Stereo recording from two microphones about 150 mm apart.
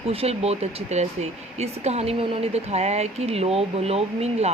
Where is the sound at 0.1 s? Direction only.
40° right (ahead or behind).